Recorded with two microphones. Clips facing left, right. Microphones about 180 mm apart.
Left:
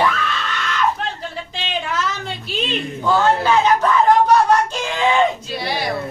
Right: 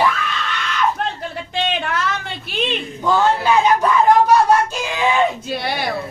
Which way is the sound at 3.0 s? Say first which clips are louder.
Even; 10° right (ahead or behind).